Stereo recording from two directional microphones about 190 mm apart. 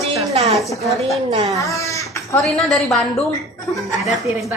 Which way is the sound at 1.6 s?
15° left (ahead or behind).